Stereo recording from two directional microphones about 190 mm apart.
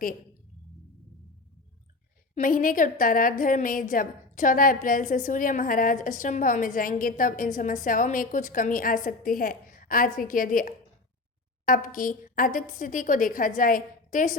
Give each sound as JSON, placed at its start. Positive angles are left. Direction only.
{"t": 2.3, "sound": "a woman's voice", "side_deg": 45}